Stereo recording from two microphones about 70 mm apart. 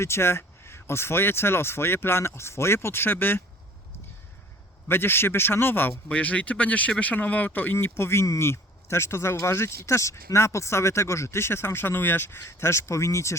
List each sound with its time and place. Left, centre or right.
0.0 s speech: left
4.9 s speech: left